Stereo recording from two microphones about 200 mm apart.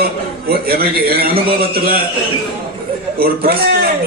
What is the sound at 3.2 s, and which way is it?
Speech, 50° right (ahead or behind).